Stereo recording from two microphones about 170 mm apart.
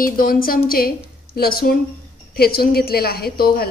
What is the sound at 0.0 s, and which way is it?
A woman's voice, 55° left (ahead or behind).